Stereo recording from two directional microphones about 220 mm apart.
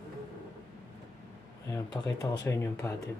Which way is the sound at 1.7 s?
15° left (ahead or behind).